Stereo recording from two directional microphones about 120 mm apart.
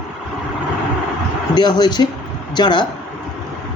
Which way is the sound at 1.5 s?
35° left (ahead or behind).